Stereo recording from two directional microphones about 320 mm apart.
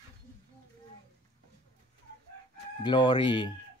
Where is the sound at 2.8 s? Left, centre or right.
Centre.